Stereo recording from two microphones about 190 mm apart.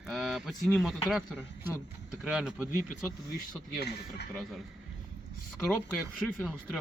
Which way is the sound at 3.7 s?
60° left (ahead or behind).